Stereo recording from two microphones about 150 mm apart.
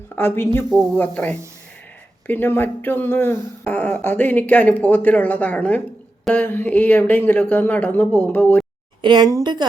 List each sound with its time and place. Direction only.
0.2 s speech: 15° left (ahead or behind)
9.0 s speech: 30° right (ahead or behind)